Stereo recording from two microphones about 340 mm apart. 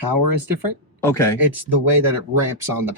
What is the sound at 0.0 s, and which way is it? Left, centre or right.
Speech, right.